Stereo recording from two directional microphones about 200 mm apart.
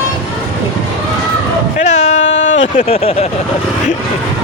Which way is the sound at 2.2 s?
70° left (ahead or behind).